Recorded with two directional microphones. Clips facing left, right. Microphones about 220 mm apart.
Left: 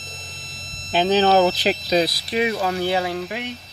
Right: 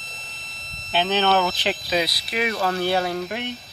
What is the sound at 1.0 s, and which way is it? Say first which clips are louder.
Speech: left 5 dB; 35° left (ahead or behind).